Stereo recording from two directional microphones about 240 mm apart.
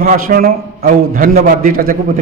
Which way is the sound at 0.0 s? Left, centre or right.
Right.